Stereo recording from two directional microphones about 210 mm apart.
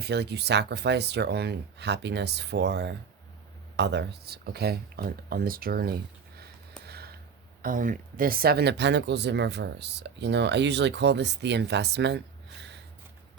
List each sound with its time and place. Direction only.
0.0 s speech: 50° right (ahead or behind)